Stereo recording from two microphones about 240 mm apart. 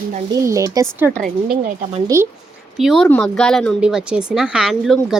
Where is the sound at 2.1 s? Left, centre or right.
Centre.